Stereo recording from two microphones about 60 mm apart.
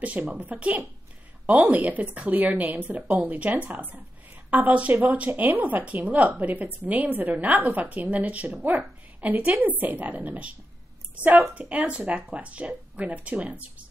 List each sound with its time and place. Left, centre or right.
0.0 s a woman's voice: right
11.5 s a woman's voice: right